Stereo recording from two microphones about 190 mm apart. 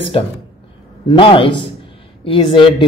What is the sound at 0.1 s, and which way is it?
Speech, 30° left (ahead or behind).